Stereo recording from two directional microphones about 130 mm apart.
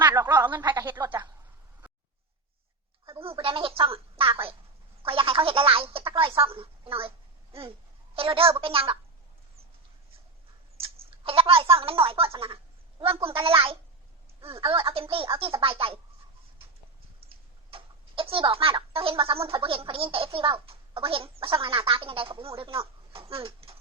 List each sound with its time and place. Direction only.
0.1 s speech: 15° right (ahead or behind)
0.6 s speech: 35° right (ahead or behind)
3.1 s a woman's voice: 45° right (ahead or behind)
8.1 s speech: 45° right (ahead or behind)
10.8 s speech: 50° right (ahead or behind)
17.2 s speech: 45° right (ahead or behind)